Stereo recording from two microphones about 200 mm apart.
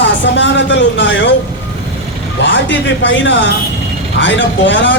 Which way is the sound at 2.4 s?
65° left (ahead or behind).